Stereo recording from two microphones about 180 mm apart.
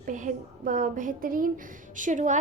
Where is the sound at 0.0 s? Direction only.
45° right (ahead or behind).